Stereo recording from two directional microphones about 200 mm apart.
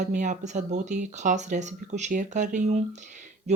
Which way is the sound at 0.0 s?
40° right (ahead or behind).